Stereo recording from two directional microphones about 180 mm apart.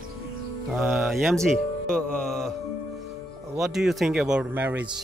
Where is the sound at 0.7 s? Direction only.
Centre (ahead or behind).